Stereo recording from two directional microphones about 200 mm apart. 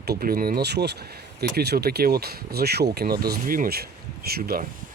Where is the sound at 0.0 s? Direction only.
50° right (ahead or behind).